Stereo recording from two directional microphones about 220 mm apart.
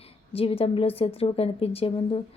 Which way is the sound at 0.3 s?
25° left (ahead or behind).